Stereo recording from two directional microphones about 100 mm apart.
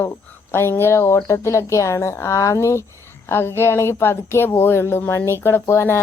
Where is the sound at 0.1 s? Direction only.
25° left (ahead or behind).